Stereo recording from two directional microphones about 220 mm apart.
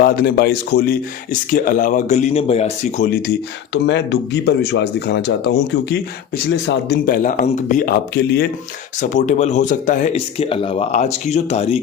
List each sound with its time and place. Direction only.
0.0 s speech: 45° left (ahead or behind)
3.1 s speech: 45° left (ahead or behind)
9.0 s speech: 35° left (ahead or behind)